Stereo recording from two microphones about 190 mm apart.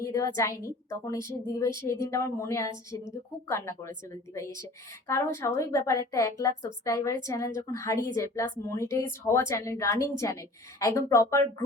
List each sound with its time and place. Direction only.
0.0 s a woman's voice: 15° left (ahead or behind)